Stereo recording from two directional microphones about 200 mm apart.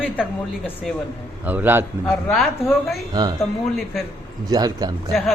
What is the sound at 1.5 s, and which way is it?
Speech, 10° right (ahead or behind).